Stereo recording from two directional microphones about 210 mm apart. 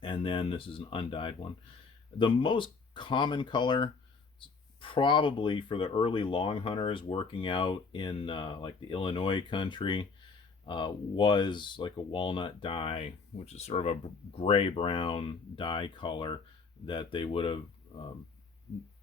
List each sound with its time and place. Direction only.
0.0 s speech: 25° left (ahead or behind)